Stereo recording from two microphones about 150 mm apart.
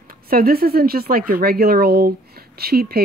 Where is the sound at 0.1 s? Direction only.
80° right.